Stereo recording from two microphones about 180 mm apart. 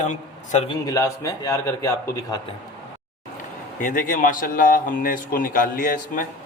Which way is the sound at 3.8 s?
50° left (ahead or behind).